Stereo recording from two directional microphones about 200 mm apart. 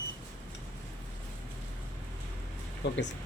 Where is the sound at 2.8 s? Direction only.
60° left (ahead or behind).